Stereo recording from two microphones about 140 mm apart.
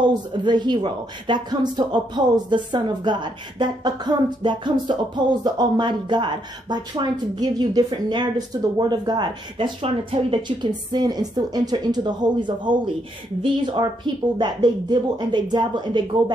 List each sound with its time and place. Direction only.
0.0 s speech: 35° right (ahead or behind)
10.9 s speech: 30° right (ahead or behind)